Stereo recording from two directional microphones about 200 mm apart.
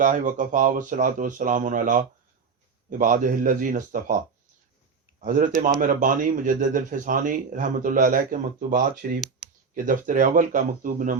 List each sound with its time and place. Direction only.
0.0 s speech: 40° right (ahead or behind)
5.2 s speech: 40° right (ahead or behind)